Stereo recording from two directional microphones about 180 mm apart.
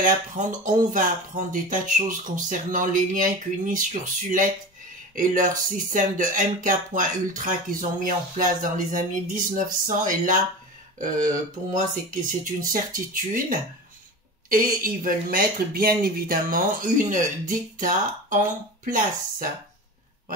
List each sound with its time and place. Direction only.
0.0 s speech: 45° right (ahead or behind)
11.7 s speech: 50° right (ahead or behind)